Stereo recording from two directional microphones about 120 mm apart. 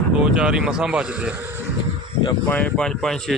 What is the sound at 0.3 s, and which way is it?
Speech, 5° right (ahead or behind).